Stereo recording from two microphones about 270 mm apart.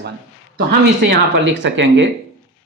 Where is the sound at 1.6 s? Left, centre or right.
Right.